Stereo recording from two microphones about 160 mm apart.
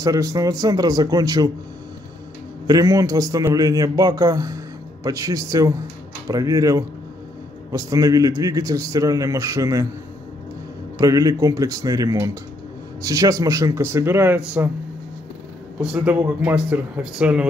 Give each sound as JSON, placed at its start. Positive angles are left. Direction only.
{"t": 0.0, "sound": "a man's voice", "side_deg": -20}
{"t": 2.6, "sound": "a man's voice", "side_deg": -20}
{"t": 11.0, "sound": "a man's voice", "side_deg": -20}
{"t": 15.8, "sound": "a man's voice", "side_deg": -5}